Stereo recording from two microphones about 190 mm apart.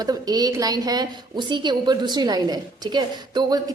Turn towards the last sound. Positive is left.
turn(degrees=-20)  # may be behind; listen again after turning